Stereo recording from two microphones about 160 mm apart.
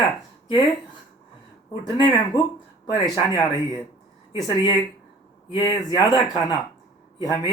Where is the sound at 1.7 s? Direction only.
30° left (ahead or behind).